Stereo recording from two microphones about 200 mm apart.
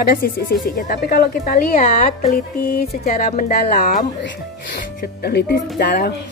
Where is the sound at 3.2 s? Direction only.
35° left (ahead or behind).